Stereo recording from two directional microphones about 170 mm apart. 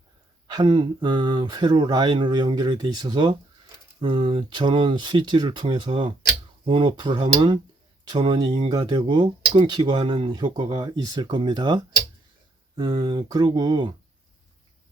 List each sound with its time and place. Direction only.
0.4 s speech: 25° right (ahead or behind)